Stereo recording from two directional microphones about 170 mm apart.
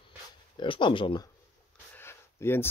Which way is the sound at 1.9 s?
15° left (ahead or behind).